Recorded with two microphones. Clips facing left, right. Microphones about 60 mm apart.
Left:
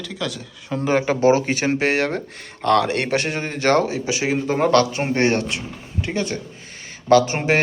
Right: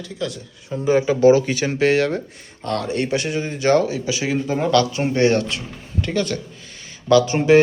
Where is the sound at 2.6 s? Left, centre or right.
Left.